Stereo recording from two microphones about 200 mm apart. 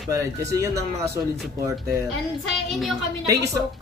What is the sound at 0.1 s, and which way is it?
Speech, 15° right (ahead or behind).